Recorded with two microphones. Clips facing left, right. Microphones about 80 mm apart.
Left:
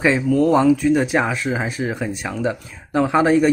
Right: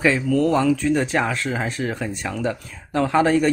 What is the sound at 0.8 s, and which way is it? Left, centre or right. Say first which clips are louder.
Speech: left 3 dB; centre.